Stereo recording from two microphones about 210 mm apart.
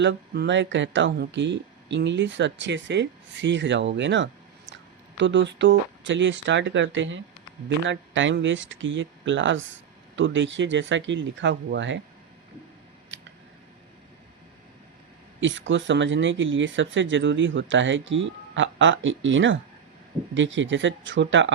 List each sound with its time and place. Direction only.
0.0 s speech: 55° right (ahead or behind)
13.1 s scissors: 60° right (ahead or behind)
15.4 s speech: 60° right (ahead or behind)